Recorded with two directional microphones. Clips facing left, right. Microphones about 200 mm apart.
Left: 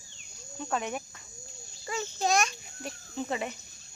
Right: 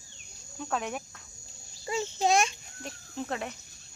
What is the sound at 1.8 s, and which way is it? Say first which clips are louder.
Insect: right 3 dB; 30° right (ahead or behind).